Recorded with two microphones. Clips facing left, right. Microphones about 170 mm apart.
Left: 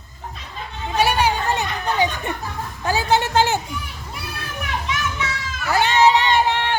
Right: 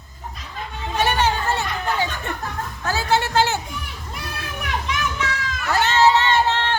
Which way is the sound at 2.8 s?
15° left (ahead or behind).